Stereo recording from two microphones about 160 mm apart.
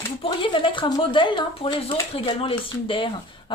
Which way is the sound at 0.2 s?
30° left (ahead or behind).